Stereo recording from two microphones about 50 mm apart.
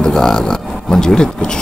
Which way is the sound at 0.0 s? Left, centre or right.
Centre.